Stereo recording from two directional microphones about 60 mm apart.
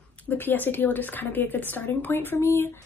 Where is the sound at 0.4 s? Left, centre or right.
Left.